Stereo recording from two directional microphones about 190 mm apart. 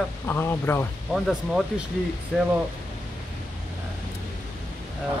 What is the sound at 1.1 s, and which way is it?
Speech, centre (ahead or behind).